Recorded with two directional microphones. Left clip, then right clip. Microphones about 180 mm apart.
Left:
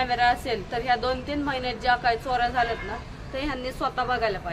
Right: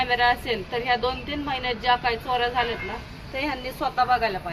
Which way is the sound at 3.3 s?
5° right (ahead or behind).